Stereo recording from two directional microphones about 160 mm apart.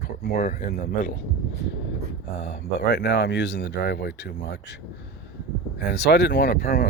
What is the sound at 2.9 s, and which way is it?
Speech, 90° left.